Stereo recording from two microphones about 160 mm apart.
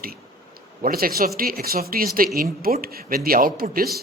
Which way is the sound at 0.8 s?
70° right (ahead or behind).